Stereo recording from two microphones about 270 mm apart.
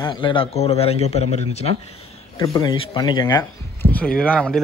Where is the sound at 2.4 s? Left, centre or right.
Centre.